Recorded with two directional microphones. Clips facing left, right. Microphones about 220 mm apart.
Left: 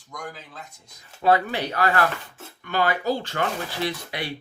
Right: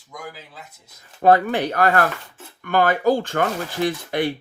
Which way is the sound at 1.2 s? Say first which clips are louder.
Right 5 dB; 50° right (ahead or behind).